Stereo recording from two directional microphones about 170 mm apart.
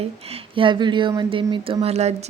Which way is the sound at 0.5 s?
30° right (ahead or behind).